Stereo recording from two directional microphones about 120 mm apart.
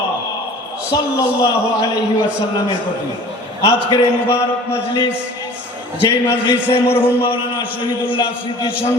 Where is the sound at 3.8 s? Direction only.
50° left (ahead or behind).